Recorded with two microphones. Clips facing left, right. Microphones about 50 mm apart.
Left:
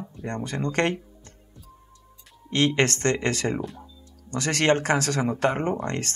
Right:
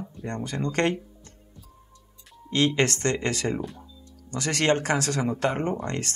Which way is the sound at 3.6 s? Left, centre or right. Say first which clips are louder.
Left 1 dB; centre.